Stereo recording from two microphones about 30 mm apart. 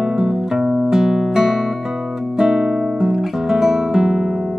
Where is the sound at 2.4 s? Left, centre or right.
Centre.